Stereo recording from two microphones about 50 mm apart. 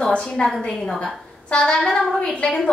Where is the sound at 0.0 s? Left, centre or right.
Centre.